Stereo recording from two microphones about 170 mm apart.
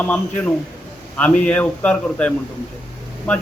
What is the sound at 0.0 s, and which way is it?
A man's voice, 10° left (ahead or behind).